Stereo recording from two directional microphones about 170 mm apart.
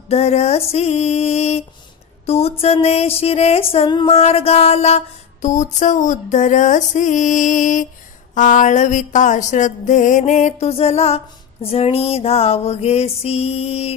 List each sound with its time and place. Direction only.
0.1 s music: 40° left (ahead or behind)
2.2 s a sound: 35° left (ahead or behind)
2.6 s music: 35° left (ahead or behind)